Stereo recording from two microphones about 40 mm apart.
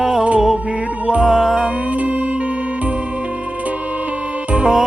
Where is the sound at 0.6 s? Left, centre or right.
Right.